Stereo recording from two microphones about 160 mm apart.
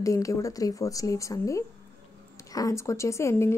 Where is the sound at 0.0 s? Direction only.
20° left (ahead or behind).